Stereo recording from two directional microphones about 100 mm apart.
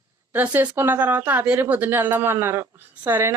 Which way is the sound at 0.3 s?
20° right (ahead or behind).